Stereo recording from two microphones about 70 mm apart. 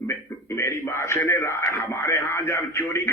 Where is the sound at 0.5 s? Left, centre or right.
Left.